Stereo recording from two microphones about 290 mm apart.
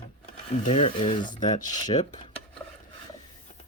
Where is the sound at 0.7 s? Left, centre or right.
Centre.